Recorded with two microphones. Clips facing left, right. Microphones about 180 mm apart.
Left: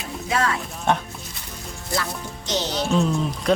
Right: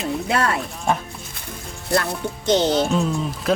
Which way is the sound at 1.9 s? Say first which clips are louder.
Right 6 dB; 60° right (ahead or behind).